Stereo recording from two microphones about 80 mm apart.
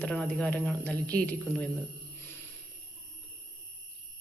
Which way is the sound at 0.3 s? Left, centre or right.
Centre.